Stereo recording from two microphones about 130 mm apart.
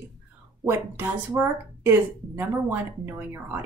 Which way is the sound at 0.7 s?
15° right (ahead or behind).